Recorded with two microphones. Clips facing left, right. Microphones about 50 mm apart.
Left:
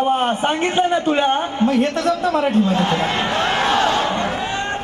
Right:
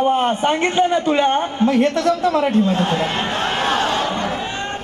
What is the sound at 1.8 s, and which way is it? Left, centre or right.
Speech, left.